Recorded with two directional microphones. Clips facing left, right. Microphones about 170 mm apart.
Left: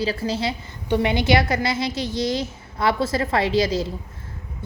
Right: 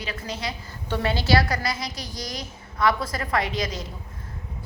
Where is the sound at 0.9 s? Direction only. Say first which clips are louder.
Left 4 dB; 15° left (ahead or behind).